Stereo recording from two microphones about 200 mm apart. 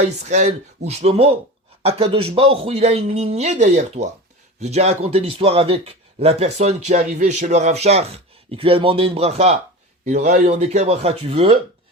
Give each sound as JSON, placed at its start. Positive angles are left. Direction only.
{"t": 0.0, "sound": "speech", "side_deg": -35}